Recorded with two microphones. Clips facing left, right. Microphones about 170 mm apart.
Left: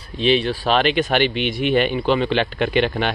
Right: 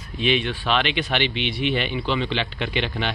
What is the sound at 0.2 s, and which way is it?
Speech, 35° left (ahead or behind).